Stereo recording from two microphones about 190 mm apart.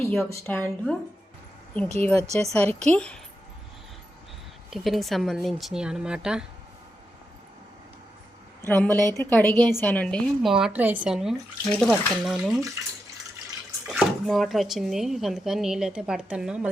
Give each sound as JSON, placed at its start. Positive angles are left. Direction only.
{"t": 0.0, "sound": "a sound", "side_deg": 5}
{"t": 0.4, "sound": "a woman's voice", "side_deg": 10}
{"t": 2.0, "sound": "a woman's voice", "side_deg": 10}
{"t": 2.2, "sound": "speech", "side_deg": -35}
{"t": 2.5, "sound": "a woman's voice", "side_deg": 5}
{"t": 4.7, "sound": "speech", "side_deg": 0}
{"t": 8.6, "sound": "a woman's voice", "side_deg": 10}
{"t": 13.8, "sound": "speech", "side_deg": 0}